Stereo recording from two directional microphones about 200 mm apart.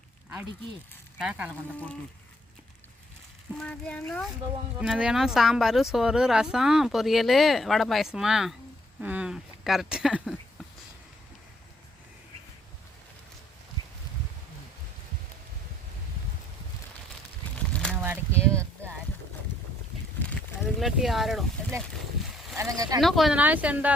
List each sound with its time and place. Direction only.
1.2 s speech: 5° right (ahead or behind)
3.6 s speech: 5° left (ahead or behind)
17.9 s boat: 10° right (ahead or behind)
20.1 s a sound: 5° left (ahead or behind)
22.5 s speech: 15° right (ahead or behind)
23.0 s speech: centre (ahead or behind)